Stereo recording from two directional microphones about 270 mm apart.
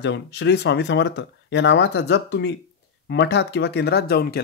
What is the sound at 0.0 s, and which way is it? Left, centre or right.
Speech, left.